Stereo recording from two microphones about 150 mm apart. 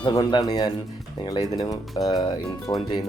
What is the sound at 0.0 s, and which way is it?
Speech, 30° left (ahead or behind).